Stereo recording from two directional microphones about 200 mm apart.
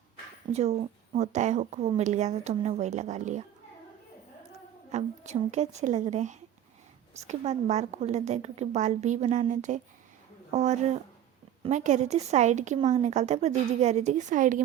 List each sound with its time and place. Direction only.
0.5 s speech: 35° right (ahead or behind)
4.9 s speech: 35° right (ahead or behind)